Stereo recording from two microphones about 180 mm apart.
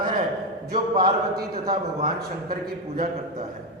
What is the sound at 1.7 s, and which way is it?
Speech, 55° right (ahead or behind).